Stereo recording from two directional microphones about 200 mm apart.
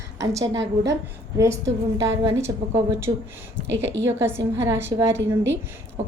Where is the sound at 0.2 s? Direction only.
15° right (ahead or behind).